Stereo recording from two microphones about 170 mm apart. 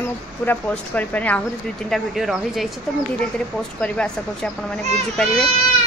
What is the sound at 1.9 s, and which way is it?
Speech, centre (ahead or behind).